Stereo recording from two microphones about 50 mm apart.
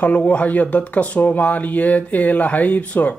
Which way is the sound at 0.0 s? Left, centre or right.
Left.